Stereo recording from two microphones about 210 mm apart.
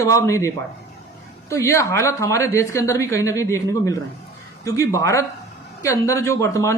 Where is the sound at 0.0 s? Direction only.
15° left (ahead or behind).